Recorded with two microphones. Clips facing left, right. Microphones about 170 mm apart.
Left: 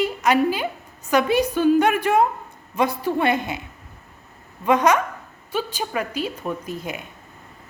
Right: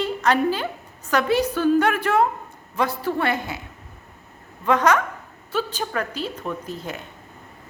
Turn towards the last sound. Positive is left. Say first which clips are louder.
# left 1 dB
turn(degrees=15)  # may be behind; listen again after turning